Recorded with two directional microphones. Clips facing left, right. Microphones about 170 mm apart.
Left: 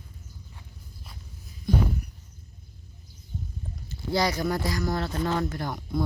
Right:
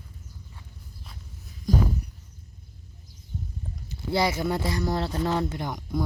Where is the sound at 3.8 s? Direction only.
25° right (ahead or behind).